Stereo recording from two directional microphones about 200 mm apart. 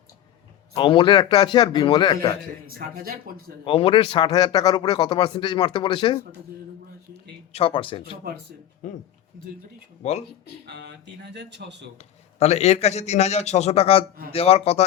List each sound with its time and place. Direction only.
0.8 s speech: 25° left (ahead or behind)
2.6 s speech: 45° right (ahead or behind)
3.7 s speech: 25° left (ahead or behind)
7.5 s speech: 25° left (ahead or behind)
8.8 s a man's voice: 40° left (ahead or behind)
10.0 s a man's voice: 35° left (ahead or behind)
10.7 s speech: 55° right (ahead or behind)
11.9 s a man's voice: 35° left (ahead or behind)